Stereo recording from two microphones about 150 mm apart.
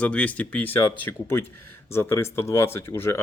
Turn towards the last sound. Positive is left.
turn(degrees=15)  # may be behind; listen again after turning